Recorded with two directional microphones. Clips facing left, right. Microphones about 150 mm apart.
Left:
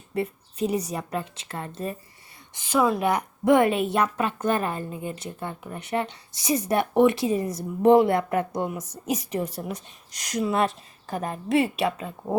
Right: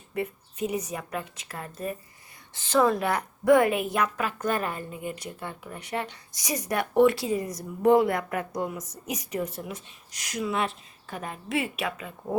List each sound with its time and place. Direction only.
0.1 s a woman's voice: 35° left (ahead or behind)
2.6 s a woman's voice: 10° left (ahead or behind); by 12.4 s 35° left (ahead or behind)